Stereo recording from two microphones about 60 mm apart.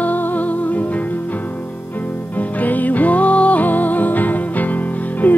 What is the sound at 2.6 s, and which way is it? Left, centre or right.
Music, left.